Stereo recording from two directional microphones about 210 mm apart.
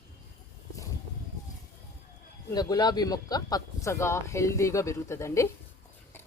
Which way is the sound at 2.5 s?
20° left (ahead or behind).